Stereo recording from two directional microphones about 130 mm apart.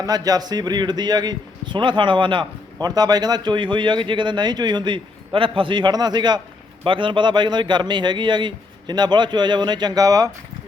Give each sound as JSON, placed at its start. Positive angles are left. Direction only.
{"t": 0.0, "sound": "speech", "side_deg": -30}